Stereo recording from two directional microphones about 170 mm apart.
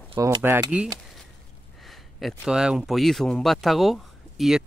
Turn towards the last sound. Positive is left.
turn(degrees=0)  # may be behind; listen again after turning